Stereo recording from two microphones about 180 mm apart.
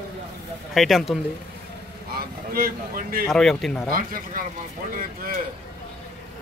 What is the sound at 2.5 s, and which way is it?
Speech, 55° right (ahead or behind).